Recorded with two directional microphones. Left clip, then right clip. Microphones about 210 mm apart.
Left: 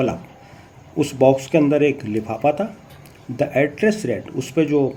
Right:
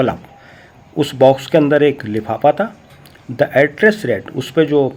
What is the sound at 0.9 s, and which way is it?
Speech, 20° right (ahead or behind).